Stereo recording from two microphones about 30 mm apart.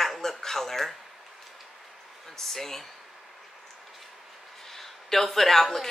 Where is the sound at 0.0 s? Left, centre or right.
Centre.